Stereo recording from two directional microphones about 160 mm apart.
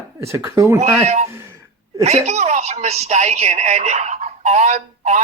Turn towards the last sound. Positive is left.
turn(degrees=-45)  # may be behind; listen again after turning